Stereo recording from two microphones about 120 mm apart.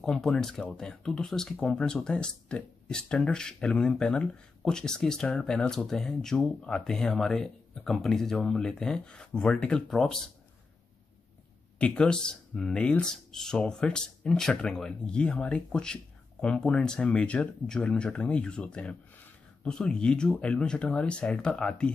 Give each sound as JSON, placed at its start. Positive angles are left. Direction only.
{"t": 0.0, "sound": "speech", "side_deg": 5}
{"t": 11.8, "sound": "speech", "side_deg": 10}